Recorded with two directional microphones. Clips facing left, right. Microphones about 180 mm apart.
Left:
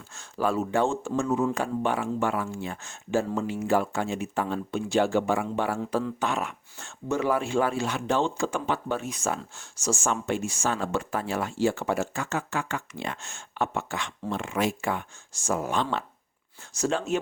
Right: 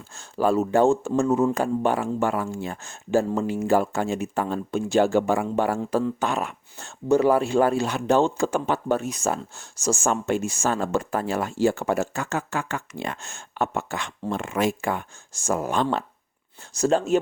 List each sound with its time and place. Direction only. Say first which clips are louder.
0.2 s a man's voice: right 5 dB; 35° right (ahead or behind)